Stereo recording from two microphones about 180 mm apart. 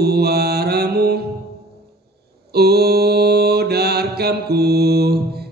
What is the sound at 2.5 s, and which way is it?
Mantra, 60° right (ahead or behind).